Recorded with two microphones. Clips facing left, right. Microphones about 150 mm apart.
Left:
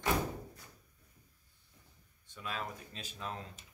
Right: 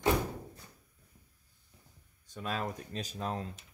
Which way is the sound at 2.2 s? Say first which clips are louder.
Right 5 dB; 40° right (ahead or behind).